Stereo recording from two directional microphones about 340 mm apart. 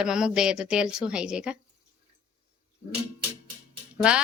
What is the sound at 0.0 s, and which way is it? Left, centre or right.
A woman's voice, centre.